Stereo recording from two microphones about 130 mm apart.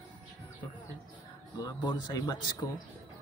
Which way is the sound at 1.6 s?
30° left (ahead or behind).